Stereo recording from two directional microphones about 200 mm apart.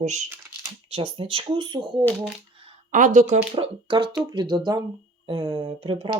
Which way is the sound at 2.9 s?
40° right (ahead or behind).